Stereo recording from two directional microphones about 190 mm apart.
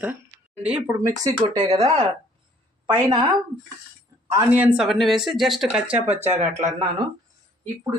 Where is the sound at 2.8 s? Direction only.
25° right (ahead or behind).